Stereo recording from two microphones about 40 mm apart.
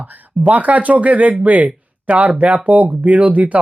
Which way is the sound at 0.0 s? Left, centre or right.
Right.